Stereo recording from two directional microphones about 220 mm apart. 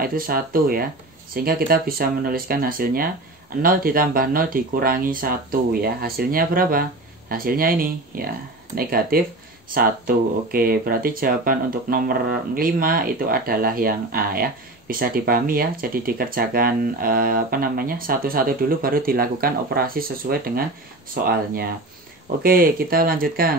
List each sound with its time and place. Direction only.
0.0 s speech: 40° right (ahead or behind)